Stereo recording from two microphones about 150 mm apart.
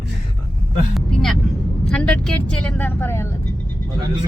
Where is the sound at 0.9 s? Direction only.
Centre (ahead or behind).